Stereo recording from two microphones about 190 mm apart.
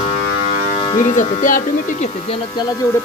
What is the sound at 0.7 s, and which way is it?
Music, 35° left (ahead or behind).